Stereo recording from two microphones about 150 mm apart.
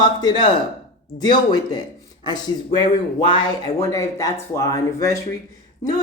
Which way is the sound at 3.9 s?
20° left (ahead or behind).